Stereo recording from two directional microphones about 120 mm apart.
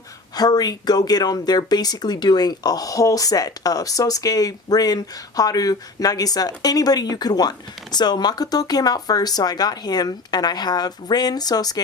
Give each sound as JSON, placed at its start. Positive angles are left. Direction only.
{"t": 0.3, "sound": "speech", "side_deg": 35}